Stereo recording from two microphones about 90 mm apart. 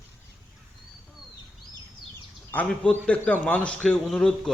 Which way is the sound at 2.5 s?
20° left (ahead or behind).